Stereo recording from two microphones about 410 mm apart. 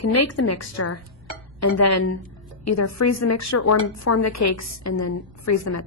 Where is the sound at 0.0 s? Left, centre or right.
Left.